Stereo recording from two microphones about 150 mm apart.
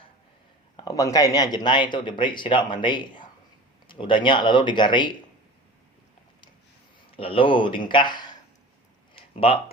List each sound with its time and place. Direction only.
0.8 s speech: 25° left (ahead or behind)
7.1 s speech: 35° left (ahead or behind)
9.1 s a sound: 40° left (ahead or behind)